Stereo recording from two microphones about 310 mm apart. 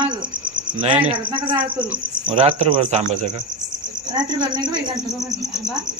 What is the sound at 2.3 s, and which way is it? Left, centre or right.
Speech, centre.